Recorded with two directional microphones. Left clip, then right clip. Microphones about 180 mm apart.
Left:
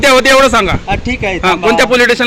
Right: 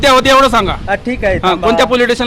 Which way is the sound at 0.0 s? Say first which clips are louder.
Left 1 dB; 10° right (ahead or behind).